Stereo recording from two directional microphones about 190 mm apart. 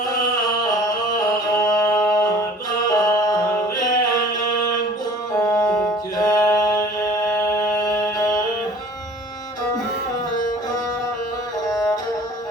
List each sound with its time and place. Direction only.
1.5 s music: 20° left (ahead or behind)
5.5 s music: 5° left (ahead or behind)
6.2 s mantra: 15° left (ahead or behind)
7.9 s music: 15° left (ahead or behind)